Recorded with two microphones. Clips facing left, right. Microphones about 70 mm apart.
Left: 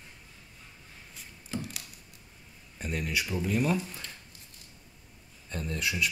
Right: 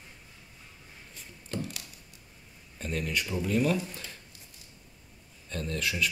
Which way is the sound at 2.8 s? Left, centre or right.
Centre.